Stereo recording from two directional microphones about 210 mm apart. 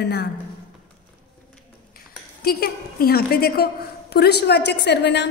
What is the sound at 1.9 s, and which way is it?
A woman's voice, 45° left (ahead or behind).